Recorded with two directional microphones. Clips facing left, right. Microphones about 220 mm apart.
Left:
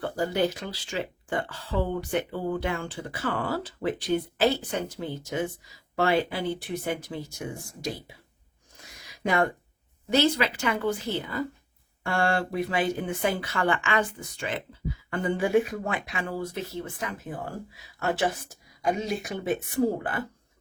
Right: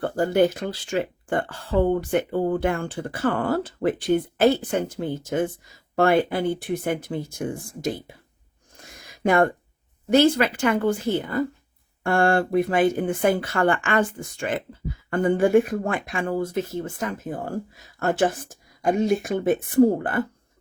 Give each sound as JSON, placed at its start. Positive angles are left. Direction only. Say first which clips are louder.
{"t": 0.0, "sound": "speech", "louder": "right 6 dB", "side_deg": -50}
{"t": 8.8, "sound": "a sound", "louder": "right 6 dB", "side_deg": -50}
{"t": 10.1, "sound": "speech", "louder": "right 6 dB", "side_deg": -50}